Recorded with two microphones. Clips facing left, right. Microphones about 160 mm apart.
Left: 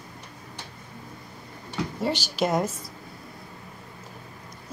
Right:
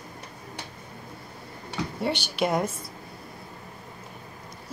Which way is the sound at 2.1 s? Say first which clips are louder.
Left 1 dB; 60° right (ahead or behind).